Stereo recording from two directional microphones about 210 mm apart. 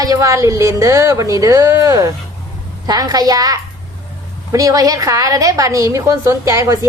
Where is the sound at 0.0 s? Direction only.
15° right (ahead or behind).